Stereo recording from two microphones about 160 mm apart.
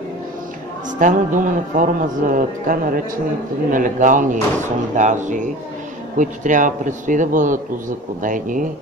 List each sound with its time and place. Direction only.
0.9 s a man's voice: 55° right (ahead or behind)